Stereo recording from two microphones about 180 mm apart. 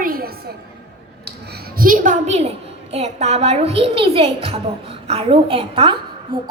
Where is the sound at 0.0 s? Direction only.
55° right (ahead or behind).